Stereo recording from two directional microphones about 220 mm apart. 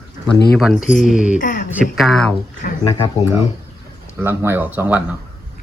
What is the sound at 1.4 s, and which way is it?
Speech, 35° left (ahead or behind).